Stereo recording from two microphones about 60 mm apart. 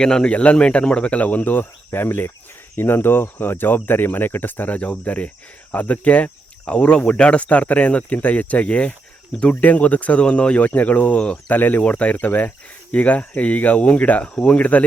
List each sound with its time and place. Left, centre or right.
0.0 s speech: centre; by 2.3 s left
2.7 s cricket: left
5.7 s speech: left